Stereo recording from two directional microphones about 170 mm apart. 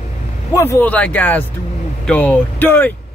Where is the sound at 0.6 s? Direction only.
15° left (ahead or behind).